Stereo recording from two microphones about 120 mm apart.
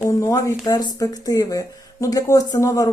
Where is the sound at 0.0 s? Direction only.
25° left (ahead or behind).